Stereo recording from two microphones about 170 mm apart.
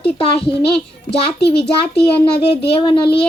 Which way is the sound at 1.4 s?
70° left (ahead or behind).